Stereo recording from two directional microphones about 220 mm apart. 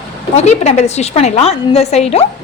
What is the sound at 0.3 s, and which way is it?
A woman's voice, 30° left (ahead or behind).